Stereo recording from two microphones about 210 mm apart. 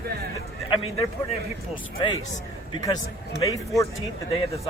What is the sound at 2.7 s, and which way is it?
A man's voice, 20° left (ahead or behind).